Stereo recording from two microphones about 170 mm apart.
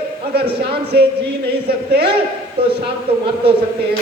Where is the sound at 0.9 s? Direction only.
75° right (ahead or behind).